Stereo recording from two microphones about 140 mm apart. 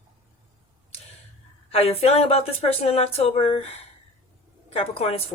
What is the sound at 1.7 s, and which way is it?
Speech, 45° left (ahead or behind).